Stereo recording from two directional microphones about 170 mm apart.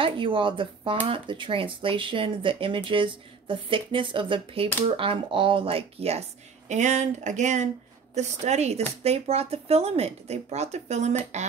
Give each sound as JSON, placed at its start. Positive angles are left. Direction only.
{"t": 0.0, "sound": "speech", "side_deg": -30}